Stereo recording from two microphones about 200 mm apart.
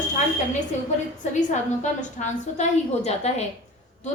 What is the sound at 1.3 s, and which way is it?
A woman's voice, 35° left (ahead or behind).